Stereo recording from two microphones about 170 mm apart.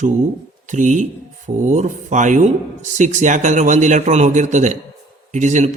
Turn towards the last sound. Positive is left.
turn(degrees=-45)  # may be behind; listen again after turning